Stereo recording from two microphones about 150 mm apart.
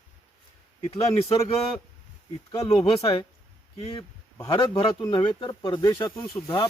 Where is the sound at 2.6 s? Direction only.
35° left (ahead or behind).